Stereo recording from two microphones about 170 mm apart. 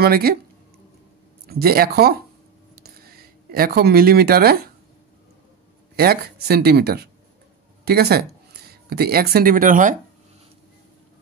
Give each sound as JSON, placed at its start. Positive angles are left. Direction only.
{"t": 0.0, "sound": "speech", "side_deg": -65}
{"t": 1.5, "sound": "speech", "side_deg": -65}
{"t": 2.7, "sound": "a sound", "side_deg": -65}
{"t": 5.9, "sound": "speech", "side_deg": -65}